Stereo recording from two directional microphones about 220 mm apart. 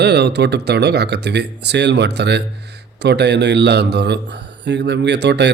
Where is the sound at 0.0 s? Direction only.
50° right (ahead or behind).